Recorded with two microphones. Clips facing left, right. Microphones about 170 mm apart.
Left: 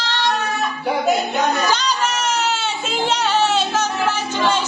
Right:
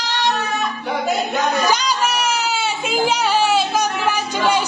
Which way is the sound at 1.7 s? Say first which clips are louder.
Right 1 dB; 10° right (ahead or behind).